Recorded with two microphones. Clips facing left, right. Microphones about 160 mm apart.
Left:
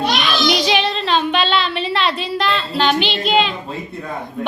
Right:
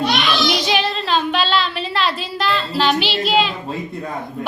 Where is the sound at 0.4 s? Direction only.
Centre (ahead or behind).